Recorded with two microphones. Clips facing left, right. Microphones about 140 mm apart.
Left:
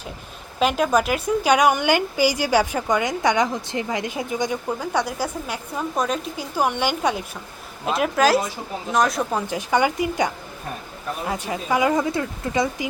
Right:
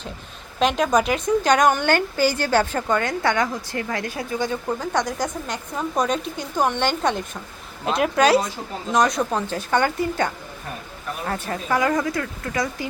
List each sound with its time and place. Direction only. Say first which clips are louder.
0.6 s a woman's voice: even; 5° left (ahead or behind)
9.5 s a woman's voice: left 1 dB; 15° left (ahead or behind)